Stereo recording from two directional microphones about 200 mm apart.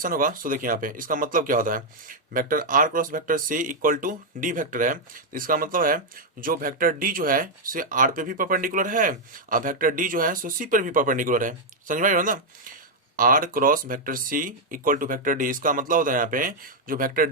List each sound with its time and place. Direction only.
0.0 s speech: 45° right (ahead or behind)